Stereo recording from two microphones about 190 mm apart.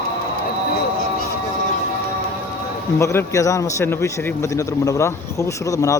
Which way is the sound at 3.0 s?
15° left (ahead or behind).